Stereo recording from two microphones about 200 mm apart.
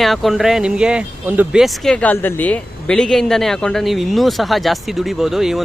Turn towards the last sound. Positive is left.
turn(degrees=0)  # may be behind; listen again after turning